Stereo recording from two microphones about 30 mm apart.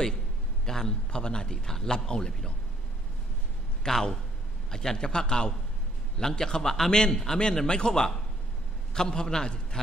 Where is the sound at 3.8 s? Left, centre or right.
Centre.